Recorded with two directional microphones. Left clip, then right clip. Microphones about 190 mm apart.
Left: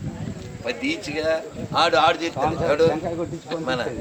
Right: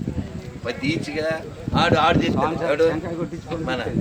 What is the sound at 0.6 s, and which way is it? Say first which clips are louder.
Speech: even; 10° left (ahead or behind).